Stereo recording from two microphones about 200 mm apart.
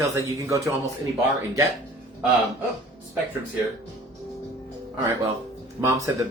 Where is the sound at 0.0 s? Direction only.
15° right (ahead or behind).